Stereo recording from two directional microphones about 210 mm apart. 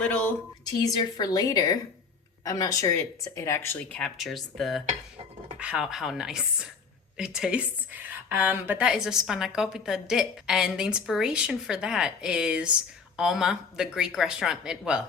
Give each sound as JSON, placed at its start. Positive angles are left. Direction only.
{"t": 0.0, "sound": "speech", "side_deg": 5}
{"t": 0.6, "sound": "a woman's voice", "side_deg": 20}